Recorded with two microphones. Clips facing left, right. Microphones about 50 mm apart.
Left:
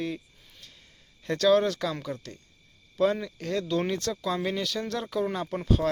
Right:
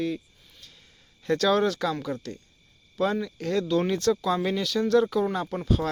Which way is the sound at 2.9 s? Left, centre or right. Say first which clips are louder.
Left 1 dB; centre.